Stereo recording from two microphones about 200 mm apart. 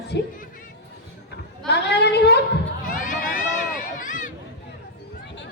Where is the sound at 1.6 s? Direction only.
55° left (ahead or behind).